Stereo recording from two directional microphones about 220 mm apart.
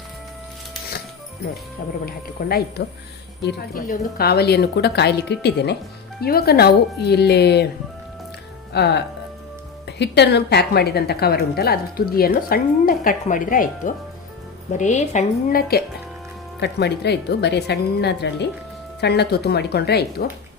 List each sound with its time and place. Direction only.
2.0 s a woman's voice: 45° left (ahead or behind)
8.7 s a woman's voice: 50° left (ahead or behind)